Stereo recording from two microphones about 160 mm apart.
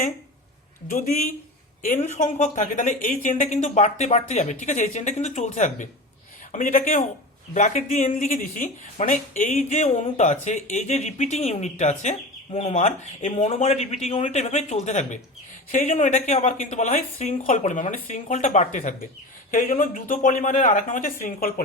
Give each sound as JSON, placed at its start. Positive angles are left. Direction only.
{"t": 0.9, "sound": "speech", "side_deg": 55}